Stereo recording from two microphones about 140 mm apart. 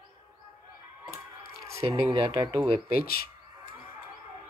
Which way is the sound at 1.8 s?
40° right (ahead or behind).